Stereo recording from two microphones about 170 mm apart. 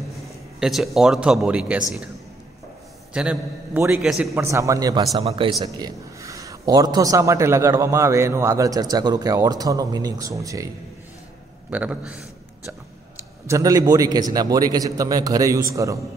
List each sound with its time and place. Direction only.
0.6 s a man's voice: centre (ahead or behind)
3.1 s a man's voice: 5° right (ahead or behind)
5.2 s speech: 35° right (ahead or behind)
5.7 s a man's voice: 20° right (ahead or behind)
11.7 s a man's voice: 10° right (ahead or behind)
13.5 s a man's voice: 20° right (ahead or behind)